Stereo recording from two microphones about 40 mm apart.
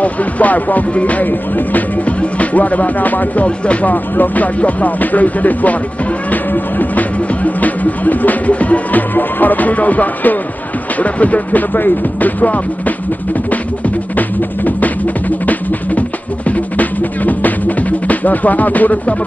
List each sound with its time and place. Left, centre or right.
0.0 s music: left
3.4 s music: left
3.9 s music: left
4.6 s music: left
9.1 s music: left
11.7 s music: left